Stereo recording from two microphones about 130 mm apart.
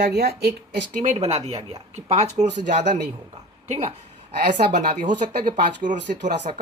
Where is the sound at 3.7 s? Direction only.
55° right (ahead or behind).